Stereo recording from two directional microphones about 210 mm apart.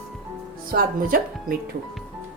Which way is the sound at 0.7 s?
45° right (ahead or behind).